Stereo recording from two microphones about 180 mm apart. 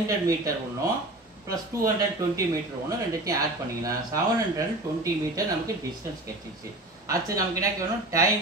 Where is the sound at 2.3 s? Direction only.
20° right (ahead or behind).